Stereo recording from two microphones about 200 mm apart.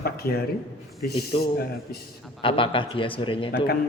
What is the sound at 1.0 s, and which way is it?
Speech, 50° left (ahead or behind).